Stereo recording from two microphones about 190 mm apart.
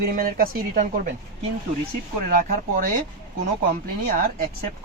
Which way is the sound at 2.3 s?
45° right (ahead or behind).